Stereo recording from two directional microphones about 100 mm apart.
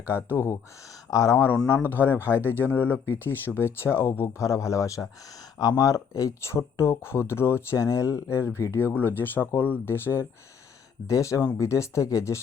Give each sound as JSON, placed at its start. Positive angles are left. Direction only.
{"t": 0.1, "sound": "a man's voice", "side_deg": 25}
{"t": 2.3, "sound": "speech", "side_deg": -20}
{"t": 2.6, "sound": "a man's voice", "side_deg": 20}